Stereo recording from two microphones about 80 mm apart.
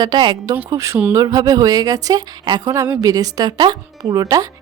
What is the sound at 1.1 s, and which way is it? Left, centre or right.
Speech, right.